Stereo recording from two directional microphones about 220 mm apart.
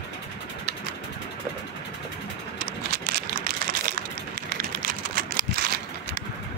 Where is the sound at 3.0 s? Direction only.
45° right (ahead or behind).